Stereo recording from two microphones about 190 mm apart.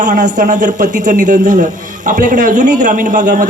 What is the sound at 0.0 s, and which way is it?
A man's voice, 40° right (ahead or behind).